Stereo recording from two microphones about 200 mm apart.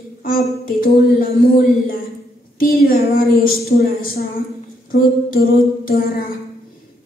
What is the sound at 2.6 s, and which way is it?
A woman's voice, 45° left (ahead or behind).